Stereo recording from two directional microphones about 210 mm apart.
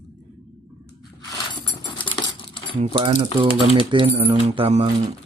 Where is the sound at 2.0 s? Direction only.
25° left (ahead or behind).